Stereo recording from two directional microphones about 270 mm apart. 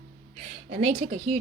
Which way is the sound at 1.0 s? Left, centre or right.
Right.